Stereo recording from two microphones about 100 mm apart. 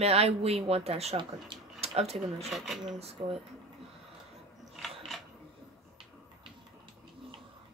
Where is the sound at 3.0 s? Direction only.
90° right.